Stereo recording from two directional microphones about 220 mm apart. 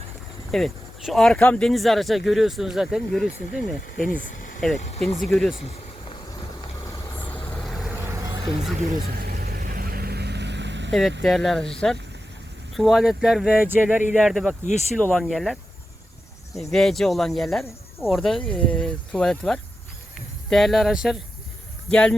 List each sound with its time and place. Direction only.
0.5 s speech: centre (ahead or behind)
4.1 s a sound: 40° left (ahead or behind)
4.6 s speech: centre (ahead or behind)
6.8 s vehicle: 10° left (ahead or behind)
8.9 s vehicle: 40° right (ahead or behind)
11.2 s speech: centre (ahead or behind)
16.7 s speech: centre (ahead or behind)